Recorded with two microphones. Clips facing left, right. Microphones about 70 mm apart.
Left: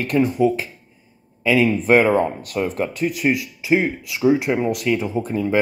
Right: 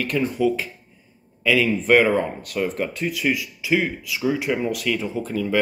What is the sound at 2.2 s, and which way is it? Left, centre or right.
Speech, left.